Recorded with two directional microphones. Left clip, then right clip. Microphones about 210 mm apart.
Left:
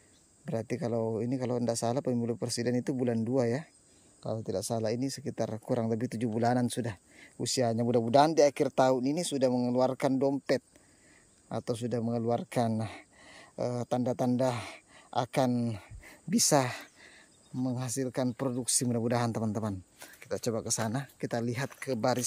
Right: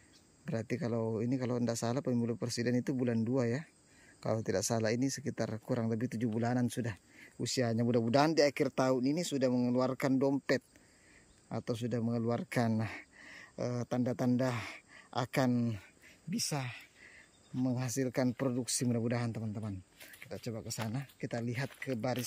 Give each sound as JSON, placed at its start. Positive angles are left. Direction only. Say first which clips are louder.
{"t": 0.5, "sound": "speech", "louder": "left 4 dB", "side_deg": 0}
{"t": 4.2, "sound": "speech", "louder": "right 1 dB", "side_deg": -10}
{"t": 17.6, "sound": "speech", "louder": "left 1 dB", "side_deg": 0}